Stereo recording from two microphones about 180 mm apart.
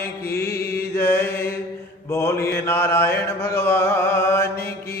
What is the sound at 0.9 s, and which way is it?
Mantra, 10° left (ahead or behind).